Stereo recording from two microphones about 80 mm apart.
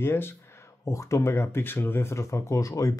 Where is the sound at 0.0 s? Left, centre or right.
Left.